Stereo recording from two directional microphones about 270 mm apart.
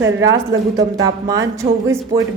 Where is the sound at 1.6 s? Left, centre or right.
Right.